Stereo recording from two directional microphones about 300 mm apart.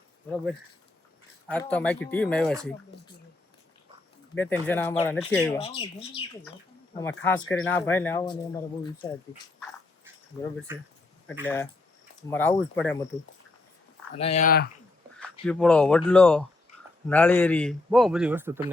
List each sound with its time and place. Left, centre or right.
1.5 s a man's voice: centre
4.4 s a man's voice: centre
5.5 s speech: centre
11.4 s a man's voice: centre
14.2 s speech: left
15.2 s a man's voice: centre